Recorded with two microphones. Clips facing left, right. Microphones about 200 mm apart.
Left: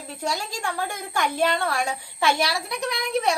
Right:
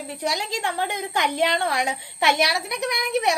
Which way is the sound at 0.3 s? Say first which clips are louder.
Right 2 dB; 20° right (ahead or behind).